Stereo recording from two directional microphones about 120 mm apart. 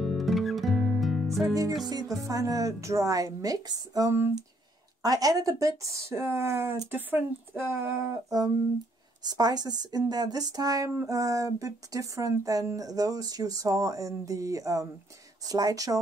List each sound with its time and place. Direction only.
0.0 s music: centre (ahead or behind)
1.9 s speech: 30° right (ahead or behind)